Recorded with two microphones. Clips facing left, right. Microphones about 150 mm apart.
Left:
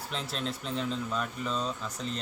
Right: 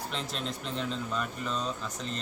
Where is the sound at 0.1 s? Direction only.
Centre (ahead or behind).